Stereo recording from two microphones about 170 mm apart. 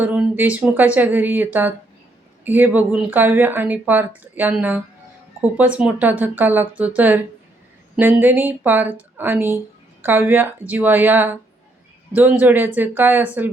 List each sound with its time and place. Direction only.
0.0 s speech: 10° right (ahead or behind)